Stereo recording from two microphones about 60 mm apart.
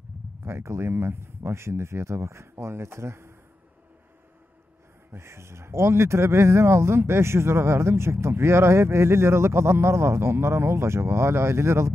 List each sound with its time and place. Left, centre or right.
0.5 s speech: right
5.1 s speech: right